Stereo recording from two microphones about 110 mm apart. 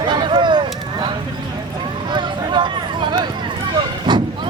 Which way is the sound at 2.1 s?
45° right (ahead or behind).